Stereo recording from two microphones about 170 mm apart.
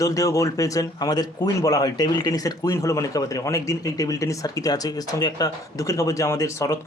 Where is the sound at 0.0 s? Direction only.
20° left (ahead or behind).